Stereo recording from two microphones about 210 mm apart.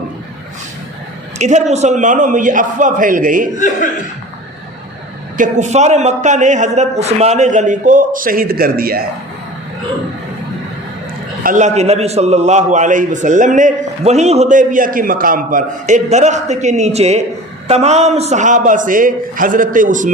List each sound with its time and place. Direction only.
1.4 s a man's voice: 35° right (ahead or behind)
5.4 s a man's voice: 35° right (ahead or behind)
11.4 s a man's voice: 35° right (ahead or behind)